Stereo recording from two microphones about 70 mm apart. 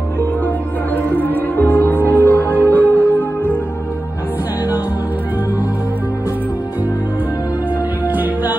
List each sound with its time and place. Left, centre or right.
1.1 s music: left
8.1 s music: right